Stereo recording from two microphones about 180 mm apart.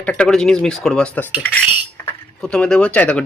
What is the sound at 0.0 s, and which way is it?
Speech, 5° left (ahead or behind).